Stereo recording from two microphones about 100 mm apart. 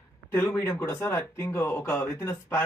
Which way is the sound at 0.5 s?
25° left (ahead or behind).